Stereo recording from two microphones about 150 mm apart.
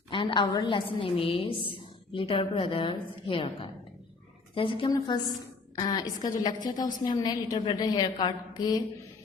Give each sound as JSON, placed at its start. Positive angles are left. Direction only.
{"t": 0.1, "sound": "a woman's voice", "side_deg": 35}